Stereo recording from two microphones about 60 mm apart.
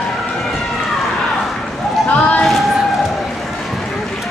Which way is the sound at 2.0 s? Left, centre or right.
Left.